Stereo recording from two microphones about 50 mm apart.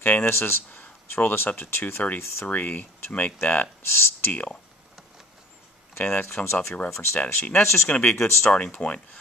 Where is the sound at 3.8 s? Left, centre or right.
Left.